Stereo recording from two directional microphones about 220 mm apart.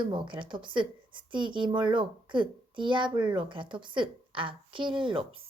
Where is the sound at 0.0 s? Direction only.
20° right (ahead or behind).